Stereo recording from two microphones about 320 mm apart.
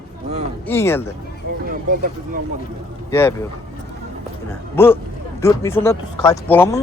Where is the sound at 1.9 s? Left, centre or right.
Right.